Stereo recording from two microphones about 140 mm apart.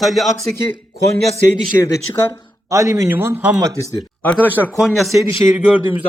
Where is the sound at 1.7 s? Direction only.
25° left (ahead or behind).